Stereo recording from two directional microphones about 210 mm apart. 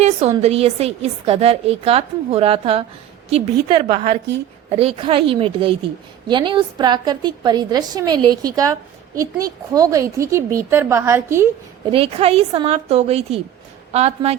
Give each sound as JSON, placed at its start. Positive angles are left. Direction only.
{"t": 0.0, "sound": "a woman's voice", "side_deg": -30}
{"t": 11.9, "sound": "a woman's voice", "side_deg": -25}